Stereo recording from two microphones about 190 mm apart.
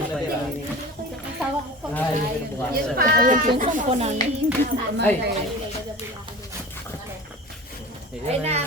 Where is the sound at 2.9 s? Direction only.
45° right (ahead or behind).